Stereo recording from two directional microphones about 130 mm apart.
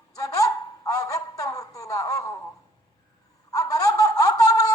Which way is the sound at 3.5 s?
25° left (ahead or behind).